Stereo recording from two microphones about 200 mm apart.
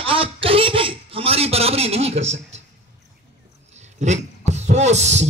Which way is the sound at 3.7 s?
35° right (ahead or behind).